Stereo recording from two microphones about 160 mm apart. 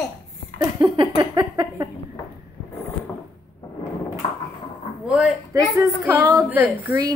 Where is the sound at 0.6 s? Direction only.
25° right (ahead or behind).